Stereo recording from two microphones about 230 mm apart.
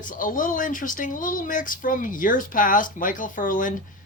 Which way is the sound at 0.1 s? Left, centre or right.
Left.